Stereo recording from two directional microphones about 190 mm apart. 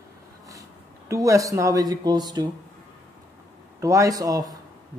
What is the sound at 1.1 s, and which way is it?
Speech, 15° right (ahead or behind).